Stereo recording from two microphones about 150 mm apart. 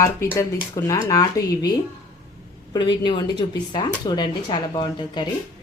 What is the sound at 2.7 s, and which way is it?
A woman's voice, 30° left (ahead or behind).